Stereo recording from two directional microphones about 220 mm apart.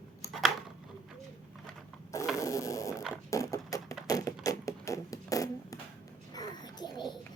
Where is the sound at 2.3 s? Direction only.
15° left (ahead or behind).